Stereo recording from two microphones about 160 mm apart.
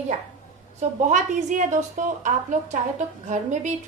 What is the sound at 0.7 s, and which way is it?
A woman's voice, 50° right (ahead or behind).